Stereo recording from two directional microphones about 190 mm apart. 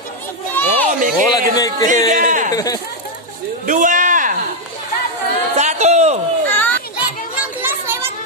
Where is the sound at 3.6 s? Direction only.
40° right (ahead or behind).